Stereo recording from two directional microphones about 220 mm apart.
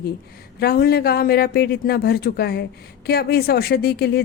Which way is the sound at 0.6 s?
45° left (ahead or behind).